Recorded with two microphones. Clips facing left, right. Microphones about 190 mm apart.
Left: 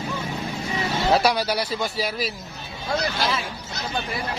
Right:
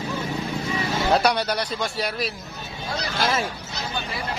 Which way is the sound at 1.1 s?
Centre (ahead or behind).